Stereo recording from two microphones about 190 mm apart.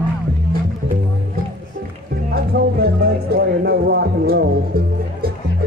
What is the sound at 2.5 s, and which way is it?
Music, 60° right (ahead or behind).